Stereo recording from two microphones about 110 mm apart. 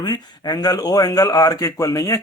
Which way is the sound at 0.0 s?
35° left (ahead or behind).